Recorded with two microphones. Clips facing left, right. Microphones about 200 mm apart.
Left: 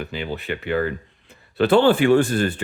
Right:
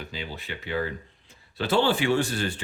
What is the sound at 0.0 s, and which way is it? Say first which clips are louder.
Speech: left 8 dB; 60° left (ahead or behind).